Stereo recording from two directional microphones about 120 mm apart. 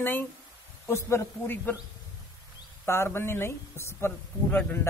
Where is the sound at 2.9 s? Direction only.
20° left (ahead or behind).